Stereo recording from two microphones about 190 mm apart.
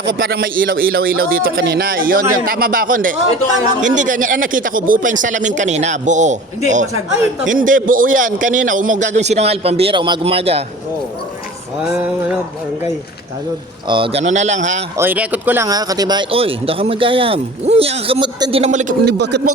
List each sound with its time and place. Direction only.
0.2 s a man's voice: 50° right (ahead or behind)
7.4 s a man's voice: 45° right (ahead or behind)
11.8 s a sound: 5° right (ahead or behind)
13.8 s a man's voice: 25° right (ahead or behind)
14.9 s speech: 10° right (ahead or behind)
18.6 s a man's voice: 40° right (ahead or behind)
19.0 s a man's voice: 65° right (ahead or behind)